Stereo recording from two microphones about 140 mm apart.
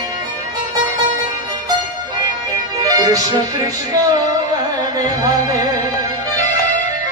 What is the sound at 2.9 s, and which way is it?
Music, 25° right (ahead or behind).